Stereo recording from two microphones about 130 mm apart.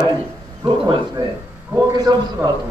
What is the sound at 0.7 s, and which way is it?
Speech, 40° right (ahead or behind).